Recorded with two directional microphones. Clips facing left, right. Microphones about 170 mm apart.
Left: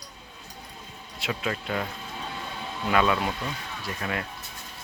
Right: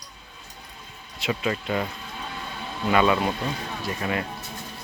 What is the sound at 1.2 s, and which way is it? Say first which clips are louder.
Speech: right 4 dB; centre (ahead or behind).